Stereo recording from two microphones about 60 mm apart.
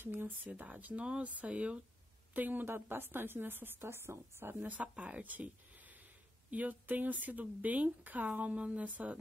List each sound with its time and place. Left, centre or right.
0.0 s a woman's voice: right
4.6 s speech: right